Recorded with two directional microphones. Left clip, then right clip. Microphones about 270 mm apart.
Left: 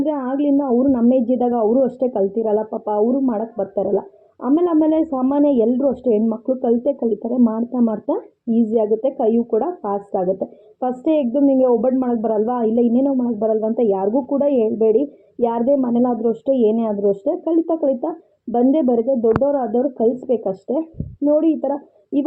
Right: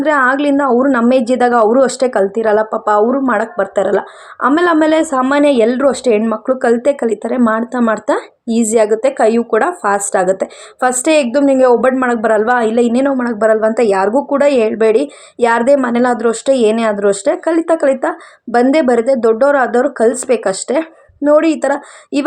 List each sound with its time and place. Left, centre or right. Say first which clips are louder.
0.0 s speech: right 9 dB; right